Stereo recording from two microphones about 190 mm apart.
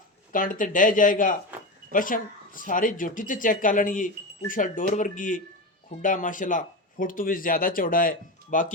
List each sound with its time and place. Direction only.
0.3 s speech: 45° left (ahead or behind)